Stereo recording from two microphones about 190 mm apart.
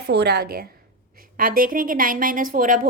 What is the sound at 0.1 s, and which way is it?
A woman's voice, 60° right (ahead or behind).